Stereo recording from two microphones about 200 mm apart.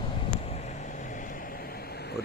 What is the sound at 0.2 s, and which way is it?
Vehicle, 30° left (ahead or behind).